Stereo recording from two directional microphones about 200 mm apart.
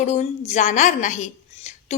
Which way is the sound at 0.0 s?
35° left (ahead or behind).